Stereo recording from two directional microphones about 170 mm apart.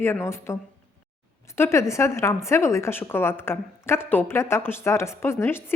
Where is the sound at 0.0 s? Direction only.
15° left (ahead or behind).